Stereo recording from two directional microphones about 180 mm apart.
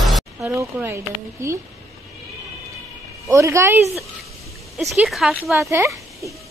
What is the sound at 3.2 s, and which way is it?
Speech, 15° right (ahead or behind).